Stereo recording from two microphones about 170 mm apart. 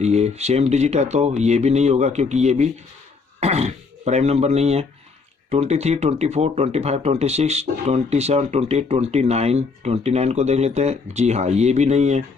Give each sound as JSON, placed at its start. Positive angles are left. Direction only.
{"t": 0.0, "sound": "speech", "side_deg": -40}